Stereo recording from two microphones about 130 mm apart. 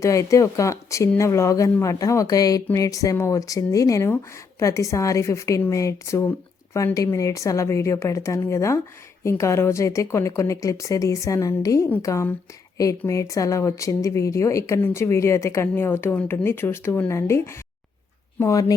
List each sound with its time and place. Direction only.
0.0 s a woman's voice: 25° left (ahead or behind)